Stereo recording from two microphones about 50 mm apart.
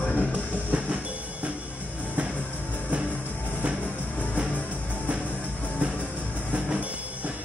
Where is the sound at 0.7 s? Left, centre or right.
Right.